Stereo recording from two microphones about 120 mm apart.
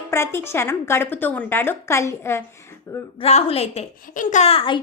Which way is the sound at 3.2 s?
55° left (ahead or behind).